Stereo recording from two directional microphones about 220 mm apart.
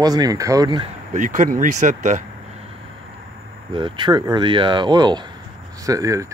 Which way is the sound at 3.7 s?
20° right (ahead or behind).